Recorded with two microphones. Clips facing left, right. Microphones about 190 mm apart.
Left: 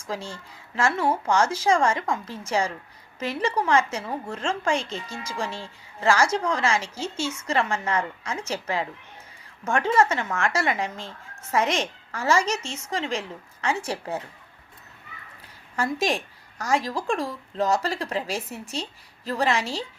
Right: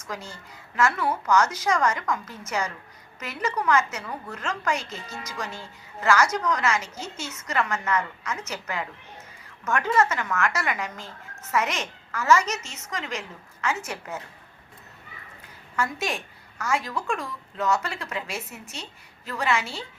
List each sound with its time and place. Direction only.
0.0 s a woman's voice: 30° left (ahead or behind)
15.7 s a woman's voice: 35° left (ahead or behind)